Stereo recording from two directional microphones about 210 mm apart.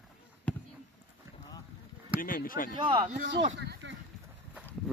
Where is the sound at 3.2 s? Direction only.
55° right (ahead or behind).